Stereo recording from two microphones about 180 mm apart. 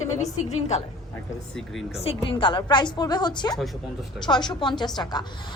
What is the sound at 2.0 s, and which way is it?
A woman's voice, 30° left (ahead or behind).